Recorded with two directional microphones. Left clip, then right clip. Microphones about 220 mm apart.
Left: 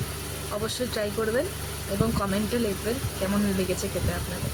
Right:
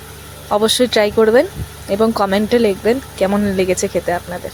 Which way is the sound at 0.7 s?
40° right (ahead or behind).